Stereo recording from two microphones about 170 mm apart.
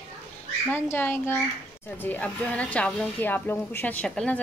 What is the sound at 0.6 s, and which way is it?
Speech, 10° left (ahead or behind).